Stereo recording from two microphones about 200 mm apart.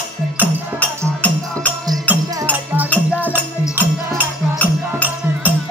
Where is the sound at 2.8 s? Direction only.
10° left (ahead or behind).